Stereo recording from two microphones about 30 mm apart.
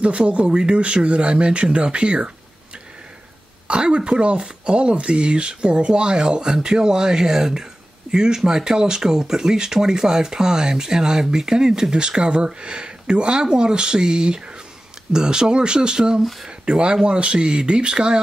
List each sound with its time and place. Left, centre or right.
0.0 s speech: right
3.6 s speech: right